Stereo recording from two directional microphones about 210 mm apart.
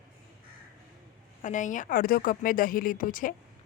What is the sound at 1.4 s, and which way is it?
Speech, 35° left (ahead or behind).